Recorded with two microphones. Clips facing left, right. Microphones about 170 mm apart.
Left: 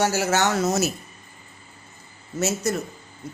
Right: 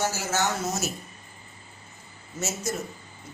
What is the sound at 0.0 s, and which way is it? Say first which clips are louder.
Speech: left 6 dB; 70° left (ahead or behind).